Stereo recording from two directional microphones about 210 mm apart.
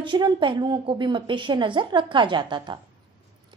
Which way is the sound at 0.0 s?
25° right (ahead or behind).